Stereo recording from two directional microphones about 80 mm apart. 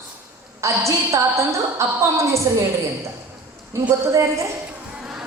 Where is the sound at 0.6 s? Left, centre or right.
Right.